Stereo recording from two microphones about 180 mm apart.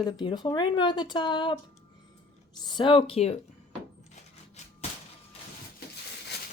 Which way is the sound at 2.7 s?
25° left (ahead or behind).